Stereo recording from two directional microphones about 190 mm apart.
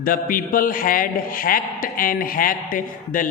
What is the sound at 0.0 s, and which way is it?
A man's voice, 50° left (ahead or behind).